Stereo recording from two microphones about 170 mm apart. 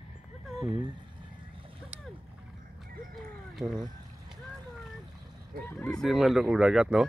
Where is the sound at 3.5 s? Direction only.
5° right (ahead or behind).